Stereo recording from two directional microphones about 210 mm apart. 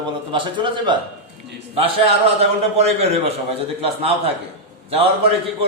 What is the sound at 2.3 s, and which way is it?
A man's voice, 30° right (ahead or behind).